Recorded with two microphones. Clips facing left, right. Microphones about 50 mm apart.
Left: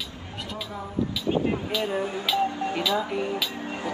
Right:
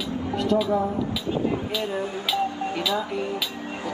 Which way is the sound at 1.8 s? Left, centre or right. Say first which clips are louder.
Even; left.